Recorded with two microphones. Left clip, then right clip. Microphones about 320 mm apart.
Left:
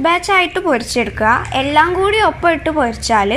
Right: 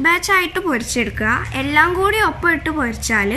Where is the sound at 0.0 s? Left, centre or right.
Centre.